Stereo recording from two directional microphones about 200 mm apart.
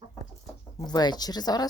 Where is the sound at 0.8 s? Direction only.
20° left (ahead or behind).